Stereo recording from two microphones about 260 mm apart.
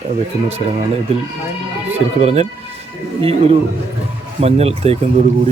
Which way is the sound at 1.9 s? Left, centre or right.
Right.